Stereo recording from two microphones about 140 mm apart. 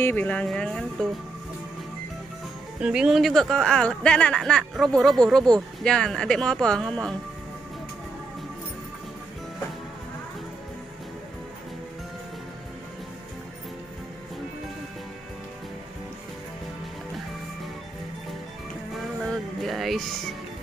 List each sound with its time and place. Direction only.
0.0 s speech: 10° left (ahead or behind)
2.8 s speech: 5° right (ahead or behind)
18.9 s music: centre (ahead or behind)